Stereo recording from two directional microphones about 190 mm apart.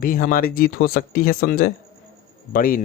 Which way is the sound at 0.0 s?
50° left (ahead or behind).